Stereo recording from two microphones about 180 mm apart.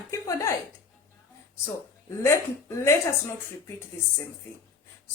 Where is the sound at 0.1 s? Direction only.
15° left (ahead or behind).